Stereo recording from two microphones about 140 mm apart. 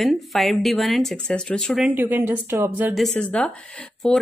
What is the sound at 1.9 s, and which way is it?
A woman's voice, 15° right (ahead or behind).